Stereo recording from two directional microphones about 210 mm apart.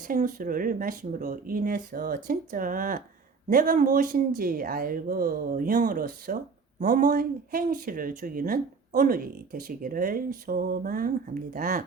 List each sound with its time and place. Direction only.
0.1 s speech: 40° right (ahead or behind)